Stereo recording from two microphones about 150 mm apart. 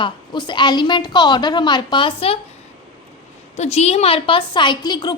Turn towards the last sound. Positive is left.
turn(degrees=30)  # may be behind; listen again after turning